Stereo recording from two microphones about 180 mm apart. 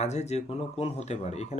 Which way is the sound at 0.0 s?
40° left (ahead or behind).